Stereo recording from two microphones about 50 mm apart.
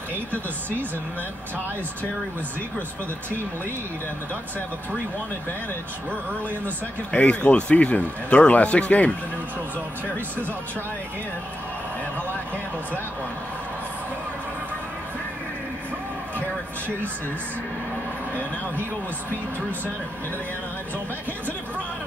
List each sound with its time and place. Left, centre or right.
7.1 s speech: left